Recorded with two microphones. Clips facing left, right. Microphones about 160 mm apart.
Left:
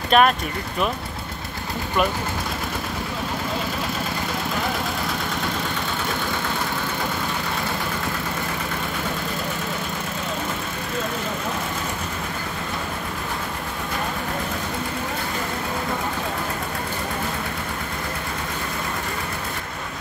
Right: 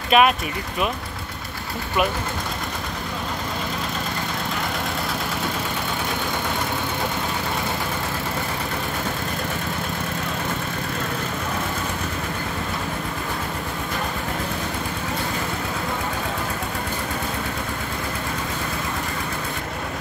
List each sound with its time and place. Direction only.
0.1 s speech: 5° right (ahead or behind)